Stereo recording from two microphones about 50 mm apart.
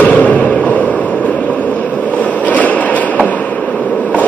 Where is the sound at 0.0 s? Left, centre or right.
Left.